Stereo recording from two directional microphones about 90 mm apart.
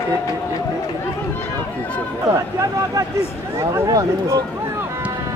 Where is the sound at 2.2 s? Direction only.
40° right (ahead or behind).